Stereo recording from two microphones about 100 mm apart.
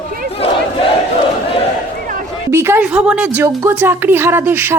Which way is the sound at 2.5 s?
25° right (ahead or behind).